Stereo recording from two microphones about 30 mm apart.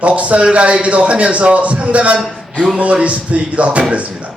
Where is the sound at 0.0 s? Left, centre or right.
Right.